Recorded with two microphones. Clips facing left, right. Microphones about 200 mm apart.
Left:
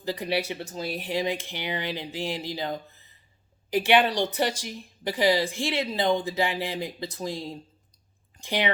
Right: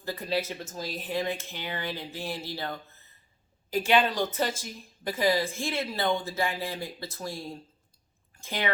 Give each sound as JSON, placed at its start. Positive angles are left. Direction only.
{"t": 0.0, "sound": "speech", "side_deg": 15}
{"t": 0.3, "sound": "speech", "side_deg": 75}
{"t": 0.6, "sound": "speech", "side_deg": 15}